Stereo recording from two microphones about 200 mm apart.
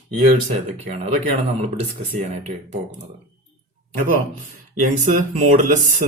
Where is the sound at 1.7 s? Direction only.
35° right (ahead or behind).